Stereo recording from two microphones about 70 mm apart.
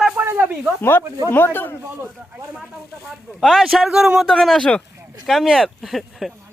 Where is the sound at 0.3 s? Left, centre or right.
Right.